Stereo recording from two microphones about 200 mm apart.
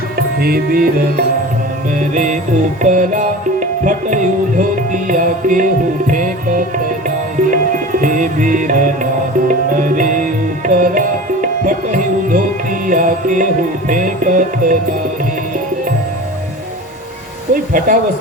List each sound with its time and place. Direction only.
0.2 s music: 50° right (ahead or behind)
8.0 s music: 40° right (ahead or behind)
17.5 s speech: 45° right (ahead or behind)